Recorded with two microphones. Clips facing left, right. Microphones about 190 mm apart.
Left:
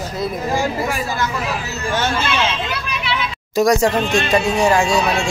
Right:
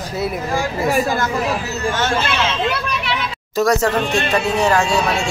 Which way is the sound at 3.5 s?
15° left (ahead or behind).